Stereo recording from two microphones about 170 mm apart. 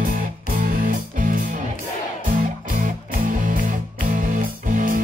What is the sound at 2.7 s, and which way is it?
Music, 50° right (ahead or behind).